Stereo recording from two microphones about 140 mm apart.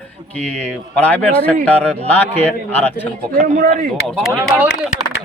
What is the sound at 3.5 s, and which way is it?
Speech, 65° right (ahead or behind).